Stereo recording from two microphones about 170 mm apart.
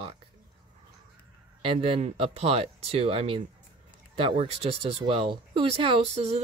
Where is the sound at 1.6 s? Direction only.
35° right (ahead or behind).